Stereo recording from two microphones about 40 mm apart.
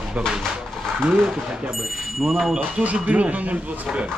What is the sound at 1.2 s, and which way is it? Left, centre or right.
Speech, centre.